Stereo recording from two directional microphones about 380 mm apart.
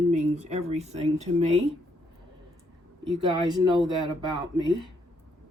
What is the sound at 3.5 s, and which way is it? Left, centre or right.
Speech, centre.